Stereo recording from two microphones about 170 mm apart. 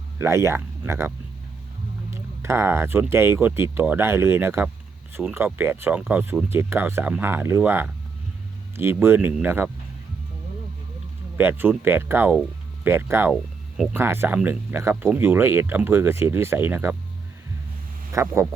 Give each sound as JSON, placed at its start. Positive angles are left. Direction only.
{"t": 0.2, "sound": "speech", "side_deg": -15}
{"t": 2.4, "sound": "speech", "side_deg": -15}
{"t": 11.3, "sound": "speech", "side_deg": -10}
{"t": 18.1, "sound": "speech", "side_deg": -15}